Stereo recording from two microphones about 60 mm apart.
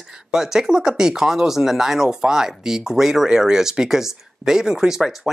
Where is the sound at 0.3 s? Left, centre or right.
Centre.